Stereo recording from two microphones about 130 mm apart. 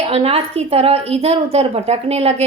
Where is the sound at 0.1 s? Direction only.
50° right (ahead or behind).